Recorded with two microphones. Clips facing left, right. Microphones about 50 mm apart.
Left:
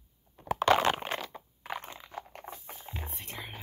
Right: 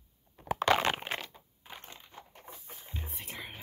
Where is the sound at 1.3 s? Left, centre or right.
Left.